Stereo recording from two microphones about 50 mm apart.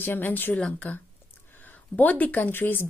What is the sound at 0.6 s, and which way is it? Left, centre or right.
Speech, left.